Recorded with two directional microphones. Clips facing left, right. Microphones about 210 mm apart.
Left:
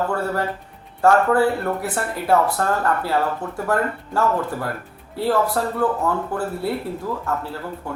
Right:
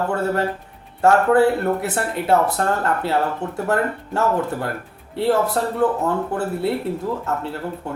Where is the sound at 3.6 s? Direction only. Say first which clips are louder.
Even; 25° right (ahead or behind).